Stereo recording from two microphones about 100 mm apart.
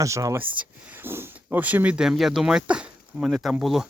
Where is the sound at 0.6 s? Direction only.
25° right (ahead or behind); by 3.8 s centre (ahead or behind).